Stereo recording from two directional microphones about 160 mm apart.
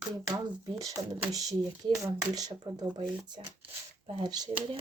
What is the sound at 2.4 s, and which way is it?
Speech, 25° right (ahead or behind).